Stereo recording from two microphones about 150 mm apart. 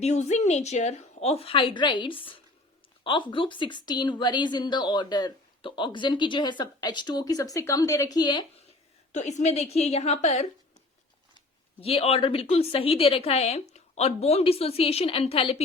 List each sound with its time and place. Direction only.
0.0 s a woman's voice: 50° left (ahead or behind); by 8.4 s 30° left (ahead or behind)
9.1 s a woman's voice: 50° left (ahead or behind)
11.8 s a woman's voice: 40° left (ahead or behind)